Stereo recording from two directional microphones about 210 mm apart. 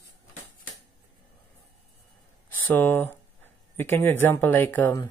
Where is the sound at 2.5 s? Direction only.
10° left (ahead or behind).